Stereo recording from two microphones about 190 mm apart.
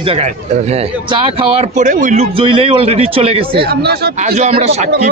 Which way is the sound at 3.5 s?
55° right (ahead or behind).